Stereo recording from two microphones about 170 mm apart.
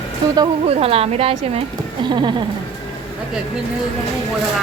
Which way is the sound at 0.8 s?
35° right (ahead or behind).